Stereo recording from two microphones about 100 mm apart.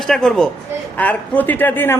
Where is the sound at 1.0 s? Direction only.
15° left (ahead or behind).